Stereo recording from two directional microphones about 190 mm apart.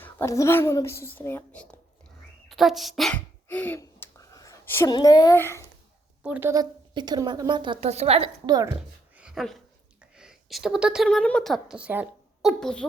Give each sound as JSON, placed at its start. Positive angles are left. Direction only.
{"t": 0.0, "sound": "a woman's voice", "side_deg": 15}
{"t": 2.5, "sound": "sneeze", "side_deg": 0}
{"t": 4.9, "sound": "a child's voice", "side_deg": 20}
{"t": 6.2, "sound": "speech", "side_deg": -5}
{"t": 6.5, "sound": "a woman's voice", "side_deg": -20}
{"t": 9.1, "sound": "dog", "side_deg": -5}
{"t": 10.2, "sound": "a woman's voice", "side_deg": -5}